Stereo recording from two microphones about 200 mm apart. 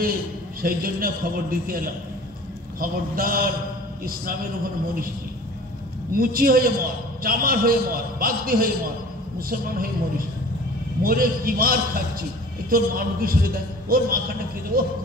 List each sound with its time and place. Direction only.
0.6 s a man's voice: 45° right (ahead or behind)
2.8 s a man's voice: 45° right (ahead or behind)
6.1 s a man's voice: 45° right (ahead or behind)